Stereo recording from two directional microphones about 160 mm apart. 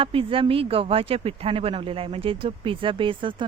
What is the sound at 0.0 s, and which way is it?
Speech, 35° right (ahead or behind).